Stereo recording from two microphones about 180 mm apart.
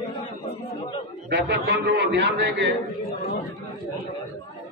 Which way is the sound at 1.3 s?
70° right (ahead or behind).